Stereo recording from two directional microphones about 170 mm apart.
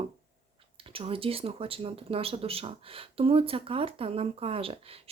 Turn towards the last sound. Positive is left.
turn(degrees=-35)  # may be behind; listen again after turning